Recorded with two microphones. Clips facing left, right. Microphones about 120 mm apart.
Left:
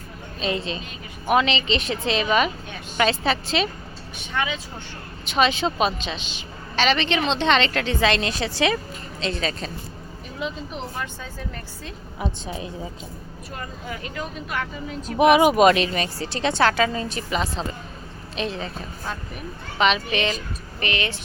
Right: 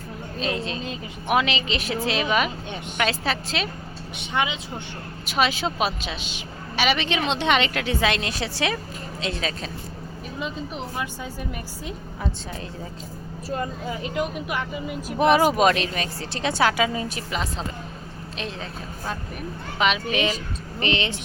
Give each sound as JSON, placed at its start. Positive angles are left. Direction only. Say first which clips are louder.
{"t": 0.3, "sound": "speech", "louder": "left 1 dB", "side_deg": 0}
{"t": 4.3, "sound": "speech", "louder": "right 1 dB", "side_deg": -20}
{"t": 5.2, "sound": "a woman's voice", "louder": "left 3 dB", "side_deg": -5}
{"t": 10.9, "sound": "a woman's voice", "louder": "right 2 dB", "side_deg": -15}
{"t": 12.2, "sound": "a woman's voice", "louder": "left 3 dB", "side_deg": 15}
{"t": 13.9, "sound": "a woman's voice", "louder": "right 4 dB", "side_deg": -20}
{"t": 15.2, "sound": "a woman's voice", "louder": "left 3 dB", "side_deg": 15}
{"t": 15.5, "sound": "speech", "louder": "left 4 dB", "side_deg": 0}
{"t": 20.7, "sound": "speech", "louder": "right 2 dB", "side_deg": -30}